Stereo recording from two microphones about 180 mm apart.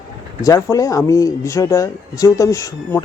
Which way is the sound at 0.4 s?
20° left (ahead or behind).